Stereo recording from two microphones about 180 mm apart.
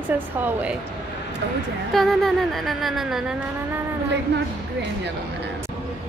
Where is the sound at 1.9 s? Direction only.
Centre (ahead or behind).